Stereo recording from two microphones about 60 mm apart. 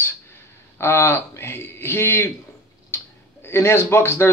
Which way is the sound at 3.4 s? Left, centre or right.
Left.